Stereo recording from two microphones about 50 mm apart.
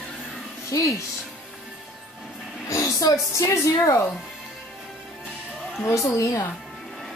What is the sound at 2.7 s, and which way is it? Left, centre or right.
Speech, left.